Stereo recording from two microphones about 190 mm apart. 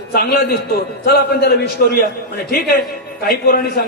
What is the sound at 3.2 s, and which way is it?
Speech, 55° left (ahead or behind).